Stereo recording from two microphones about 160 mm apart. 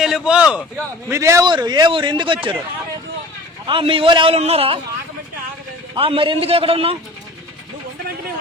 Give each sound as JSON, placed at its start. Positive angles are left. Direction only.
{"t": 0.0, "sound": "a sound", "side_deg": -5}
{"t": 1.1, "sound": "a man's voice", "side_deg": -20}
{"t": 3.7, "sound": "a man's voice", "side_deg": -35}
{"t": 5.9, "sound": "a man's voice", "side_deg": -35}